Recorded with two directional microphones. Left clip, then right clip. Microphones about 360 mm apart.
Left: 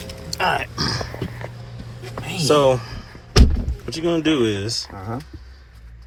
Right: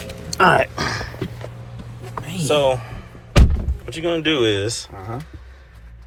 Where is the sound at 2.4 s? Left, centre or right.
Centre.